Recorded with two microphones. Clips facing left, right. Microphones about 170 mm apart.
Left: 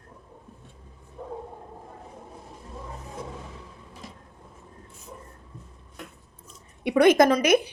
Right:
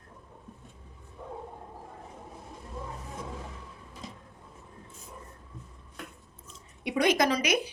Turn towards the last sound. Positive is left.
turn(degrees=50)  # may be behind; listen again after turning